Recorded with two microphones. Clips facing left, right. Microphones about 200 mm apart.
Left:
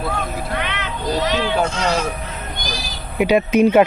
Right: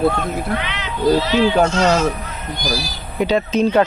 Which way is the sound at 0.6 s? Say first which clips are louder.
Left 2 dB; 55° left (ahead or behind).